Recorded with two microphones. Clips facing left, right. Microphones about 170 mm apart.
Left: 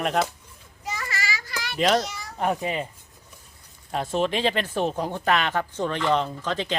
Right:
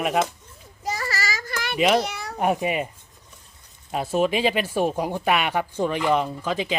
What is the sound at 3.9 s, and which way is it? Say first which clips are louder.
Speech: right 3 dB; 5° right (ahead or behind).